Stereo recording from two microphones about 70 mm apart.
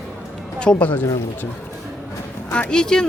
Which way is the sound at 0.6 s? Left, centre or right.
Centre.